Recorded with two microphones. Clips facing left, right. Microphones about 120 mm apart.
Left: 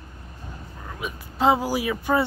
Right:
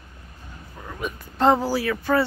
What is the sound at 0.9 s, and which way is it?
Speech, 5° left (ahead or behind).